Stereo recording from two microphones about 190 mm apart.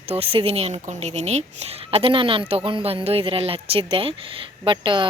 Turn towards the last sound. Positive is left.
turn(degrees=-25)  # may be behind; listen again after turning